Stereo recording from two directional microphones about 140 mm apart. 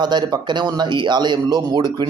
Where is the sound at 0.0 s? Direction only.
30° right (ahead or behind).